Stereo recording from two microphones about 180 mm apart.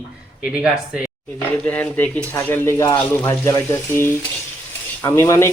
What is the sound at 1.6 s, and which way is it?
Speech, 10° left (ahead or behind).